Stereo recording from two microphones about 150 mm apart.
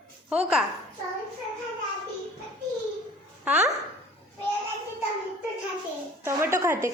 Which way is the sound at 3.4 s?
10° right (ahead or behind).